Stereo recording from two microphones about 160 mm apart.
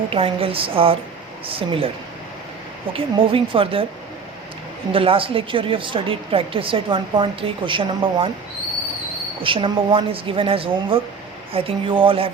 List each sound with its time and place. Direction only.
0.1 s a woman's voice: 35° right (ahead or behind)
2.9 s a woman's voice: 35° right (ahead or behind)
4.9 s a woman's voice: 35° right (ahead or behind)
9.4 s a woman's voice: 35° right (ahead or behind)